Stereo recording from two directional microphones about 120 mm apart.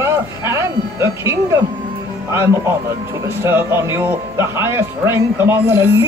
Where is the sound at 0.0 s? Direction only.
20° right (ahead or behind).